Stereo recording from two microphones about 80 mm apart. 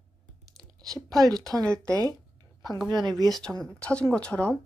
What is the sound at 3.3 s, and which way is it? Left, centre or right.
Speech, centre.